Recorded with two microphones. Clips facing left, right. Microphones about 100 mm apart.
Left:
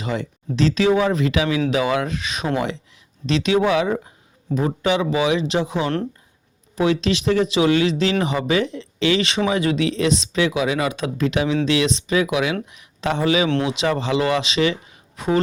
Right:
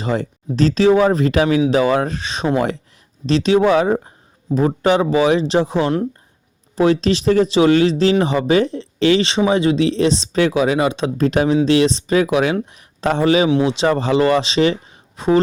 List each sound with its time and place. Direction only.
0.0 s speech: 40° right (ahead or behind)